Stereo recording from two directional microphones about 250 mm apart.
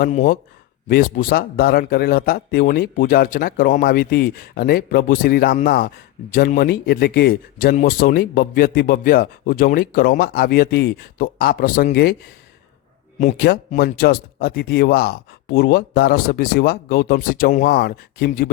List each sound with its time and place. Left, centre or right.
0.0 s speech: left
13.1 s speech: left